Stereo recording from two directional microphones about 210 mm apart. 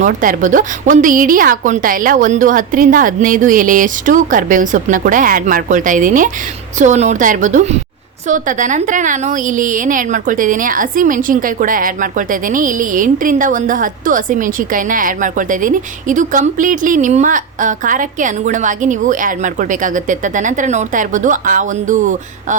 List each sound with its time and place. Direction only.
0.0 s a woman's voice: 40° right (ahead or behind)